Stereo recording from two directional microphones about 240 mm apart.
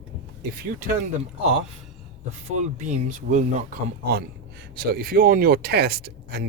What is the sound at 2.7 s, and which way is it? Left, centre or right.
Speech, right.